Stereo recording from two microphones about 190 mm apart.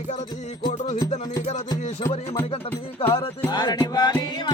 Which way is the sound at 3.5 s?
20° left (ahead or behind).